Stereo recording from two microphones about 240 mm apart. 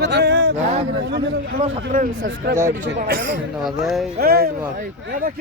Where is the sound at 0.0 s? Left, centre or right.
Right.